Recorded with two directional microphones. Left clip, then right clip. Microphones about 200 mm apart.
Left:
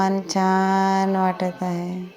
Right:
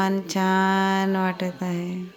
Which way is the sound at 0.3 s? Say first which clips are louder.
Left 2 dB; 25° right (ahead or behind).